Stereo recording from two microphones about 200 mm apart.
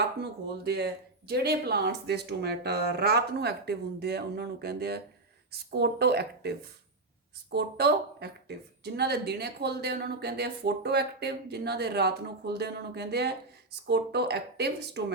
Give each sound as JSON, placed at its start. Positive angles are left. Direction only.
{"t": 0.2, "sound": "a woman's voice", "side_deg": -55}